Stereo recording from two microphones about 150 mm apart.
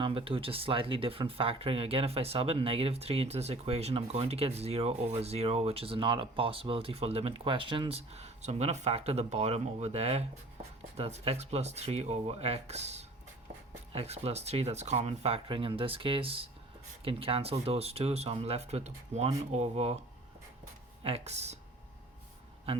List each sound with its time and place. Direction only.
0.0 s speech: 35° right (ahead or behind)
21.0 s speech: 45° right (ahead or behind)